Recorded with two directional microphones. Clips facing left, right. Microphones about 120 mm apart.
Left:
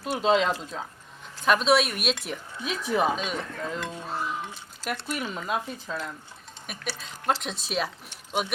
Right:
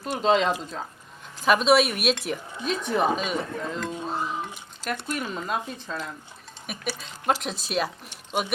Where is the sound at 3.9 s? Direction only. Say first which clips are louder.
Right 2 dB; 15° right (ahead or behind).